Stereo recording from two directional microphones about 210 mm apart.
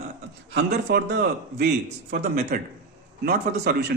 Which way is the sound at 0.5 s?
55° right (ahead or behind).